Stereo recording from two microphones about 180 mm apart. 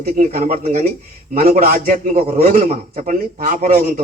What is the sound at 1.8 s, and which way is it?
Speech, 40° right (ahead or behind).